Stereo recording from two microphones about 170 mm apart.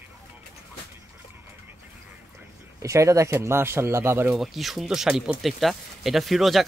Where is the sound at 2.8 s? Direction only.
20° right (ahead or behind).